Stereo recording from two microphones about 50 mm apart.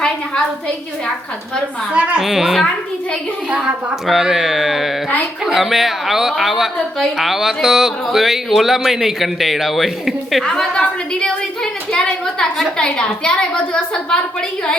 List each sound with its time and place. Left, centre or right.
1.9 s a child's voice: right
2.2 s speech: centre
3.5 s a child's voice: right
4.0 s speech: centre
10.6 s a woman's voice: centre